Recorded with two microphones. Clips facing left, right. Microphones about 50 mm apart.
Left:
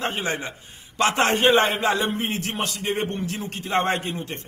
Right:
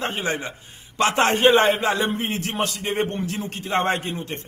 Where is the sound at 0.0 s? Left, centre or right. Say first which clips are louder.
Right 1 dB; right.